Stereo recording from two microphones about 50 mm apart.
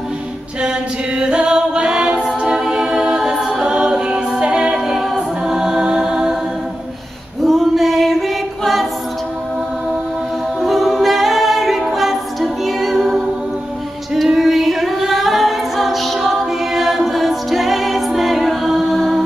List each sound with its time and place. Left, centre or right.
0.6 s music: centre
2.4 s a capella: centre
3.6 s a capella: centre
7.4 s male singing: centre
10.6 s a capella: centre
11.9 s music: centre
14.1 s a capella: centre